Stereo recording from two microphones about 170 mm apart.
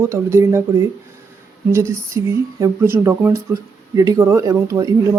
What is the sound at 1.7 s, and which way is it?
Speech, 15° right (ahead or behind).